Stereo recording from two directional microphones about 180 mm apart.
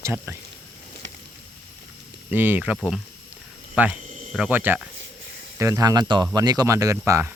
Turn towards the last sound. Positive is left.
turn(degrees=-15)  # may be behind; listen again after turning